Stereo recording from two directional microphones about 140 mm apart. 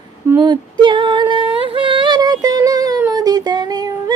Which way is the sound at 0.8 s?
35° right (ahead or behind).